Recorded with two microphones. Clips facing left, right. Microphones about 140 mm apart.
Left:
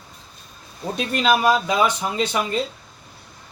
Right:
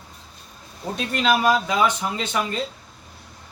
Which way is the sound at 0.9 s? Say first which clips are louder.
Left 1 dB; 20° left (ahead or behind).